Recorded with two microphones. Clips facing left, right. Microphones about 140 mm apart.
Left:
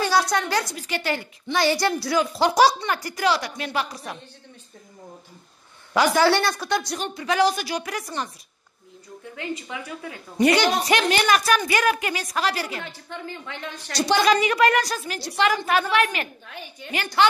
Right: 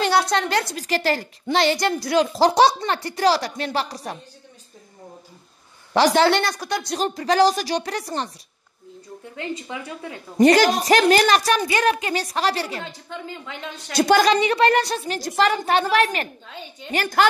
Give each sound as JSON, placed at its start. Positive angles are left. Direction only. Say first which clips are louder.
{"t": 0.3, "sound": "a woman's voice", "louder": "right 2 dB", "side_deg": -65}
{"t": 0.8, "sound": "a woman's voice", "louder": "right 5 dB", "side_deg": -35}
{"t": 1.7, "sound": "speech", "louder": "right 1 dB", "side_deg": -20}
{"t": 2.3, "sound": "a woman's voice", "louder": "right 1 dB", "side_deg": -30}
{"t": 5.9, "sound": "speech", "louder": "right 2 dB", "side_deg": -30}
{"t": 7.0, "sound": "a woman's voice", "louder": "right 6 dB", "side_deg": -35}
{"t": 9.4, "sound": "speech", "louder": "right 2 dB", "side_deg": -25}
{"t": 10.3, "sound": "a woman's voice", "louder": "right 4 dB", "side_deg": -40}
{"t": 13.1, "sound": "speech", "louder": "even", "side_deg": -15}
{"t": 13.9, "sound": "a woman's voice", "louder": "right 4 dB", "side_deg": -50}
{"t": 14.3, "sound": "a woman's voice", "louder": "right 1 dB", "side_deg": -30}
{"t": 16.4, "sound": "speech", "louder": "right 1 dB", "side_deg": -20}
{"t": 16.9, "sound": "a woman's voice", "louder": "right 1 dB", "side_deg": -45}